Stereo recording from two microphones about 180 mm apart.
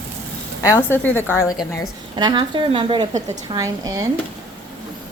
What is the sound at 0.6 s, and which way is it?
A woman's voice, 15° left (ahead or behind).